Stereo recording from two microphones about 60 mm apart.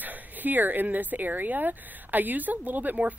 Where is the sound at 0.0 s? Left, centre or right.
Right.